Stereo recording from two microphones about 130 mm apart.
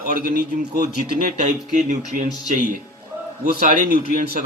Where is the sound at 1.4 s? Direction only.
70° right (ahead or behind).